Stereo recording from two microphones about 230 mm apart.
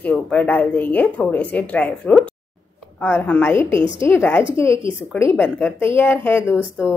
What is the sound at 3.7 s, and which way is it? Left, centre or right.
Speech, right.